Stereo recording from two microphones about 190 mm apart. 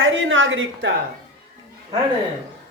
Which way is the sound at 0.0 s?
90° right.